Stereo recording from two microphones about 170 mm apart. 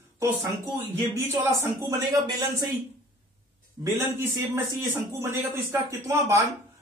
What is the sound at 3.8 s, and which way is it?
A man's voice, 10° right (ahead or behind).